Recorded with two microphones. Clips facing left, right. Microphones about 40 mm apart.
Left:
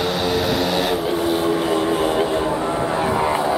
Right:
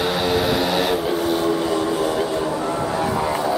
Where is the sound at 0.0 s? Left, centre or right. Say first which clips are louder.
Even; centre.